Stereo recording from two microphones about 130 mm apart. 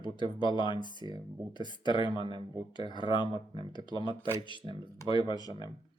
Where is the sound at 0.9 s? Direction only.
35° right (ahead or behind).